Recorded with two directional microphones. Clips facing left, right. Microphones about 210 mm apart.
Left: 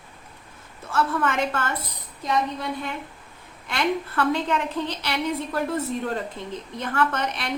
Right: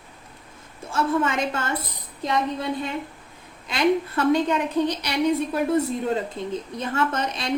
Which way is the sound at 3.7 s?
20° right (ahead or behind).